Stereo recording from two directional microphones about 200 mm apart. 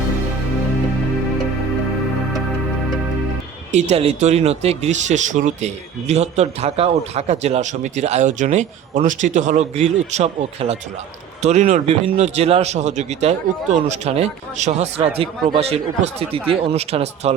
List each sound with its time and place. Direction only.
3.7 s speech: 35° right (ahead or behind)